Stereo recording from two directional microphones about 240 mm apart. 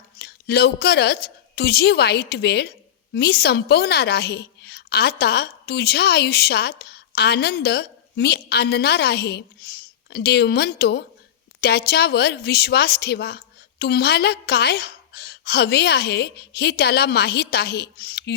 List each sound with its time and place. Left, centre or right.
0.2 s a woman's voice: left